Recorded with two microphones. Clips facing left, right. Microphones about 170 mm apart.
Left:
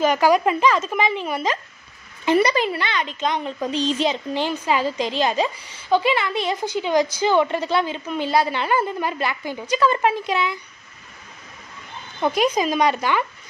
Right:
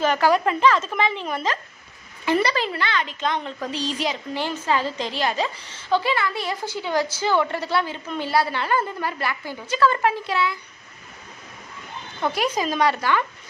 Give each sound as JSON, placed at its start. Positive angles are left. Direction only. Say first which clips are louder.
{"t": 0.0, "sound": "a child's voice", "louder": "left 2 dB", "side_deg": 15}
{"t": 12.2, "sound": "a child's voice", "louder": "left 4 dB", "side_deg": 20}